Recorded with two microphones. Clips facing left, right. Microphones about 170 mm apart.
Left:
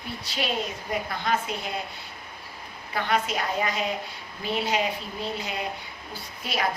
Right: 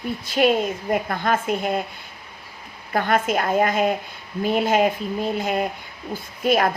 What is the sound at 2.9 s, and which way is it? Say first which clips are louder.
A woman's voice: right 6 dB; 50° right (ahead or behind).